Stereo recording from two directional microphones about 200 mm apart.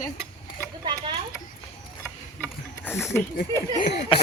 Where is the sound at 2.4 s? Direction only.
10° left (ahead or behind).